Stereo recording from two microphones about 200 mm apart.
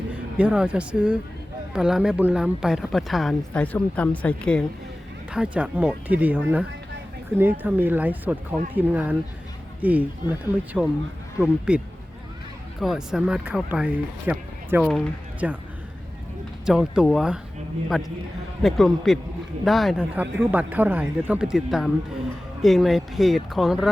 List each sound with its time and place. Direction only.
0.1 s speech: 5° right (ahead or behind)
5.3 s speech: 5° right (ahead or behind)
12.8 s speech: centre (ahead or behind)
16.6 s speech: 5° right (ahead or behind)